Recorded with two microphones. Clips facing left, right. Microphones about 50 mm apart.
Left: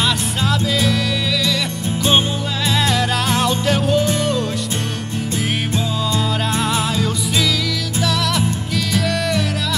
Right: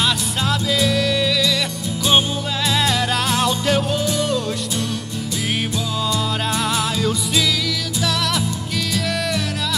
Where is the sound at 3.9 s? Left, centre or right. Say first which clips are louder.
Left 4 dB; left.